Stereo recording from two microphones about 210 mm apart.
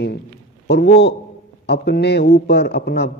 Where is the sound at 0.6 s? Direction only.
50° left (ahead or behind).